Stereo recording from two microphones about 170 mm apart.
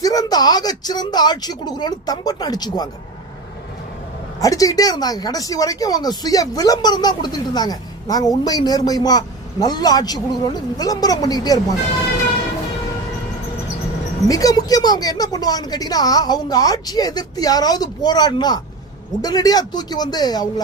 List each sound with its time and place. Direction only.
0.0 s speech: 20° left (ahead or behind)
4.4 s speech: 20° left (ahead or behind)
14.3 s speech: 20° left (ahead or behind)